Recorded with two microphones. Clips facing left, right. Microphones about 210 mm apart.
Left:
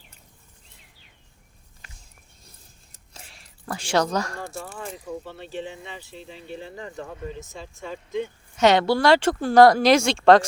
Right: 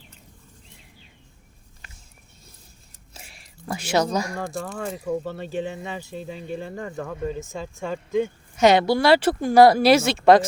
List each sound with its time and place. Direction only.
3.1 s a sound: 10° right (ahead or behind)
4.1 s speech: 10° right (ahead or behind)
4.6 s speech: 50° right (ahead or behind)
8.5 s speech: 10° right (ahead or behind)